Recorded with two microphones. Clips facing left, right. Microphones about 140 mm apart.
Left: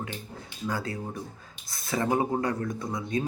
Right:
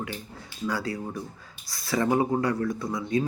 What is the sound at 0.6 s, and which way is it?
Speech, 25° left (ahead or behind).